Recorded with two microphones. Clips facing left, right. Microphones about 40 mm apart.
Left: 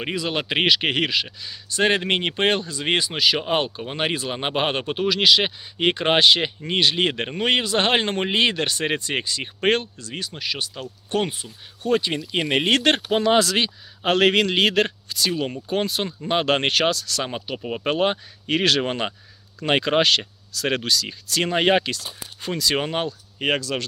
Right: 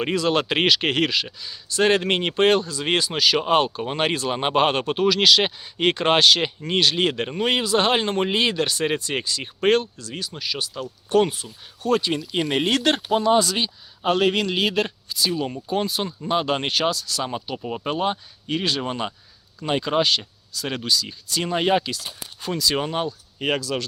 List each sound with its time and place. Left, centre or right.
0.0 s speech: centre
3.4 s speech: centre; by 10.8 s left
11.1 s speech: left
12.6 s speech: left
13.2 s speech: left
14.0 s speech: left
14.4 s speech: left
17.6 s speech: left
17.8 s speech: left
18.8 s speech: left
21.5 s speech: left